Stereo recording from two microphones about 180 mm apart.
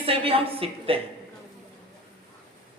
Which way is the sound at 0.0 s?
30° right (ahead or behind).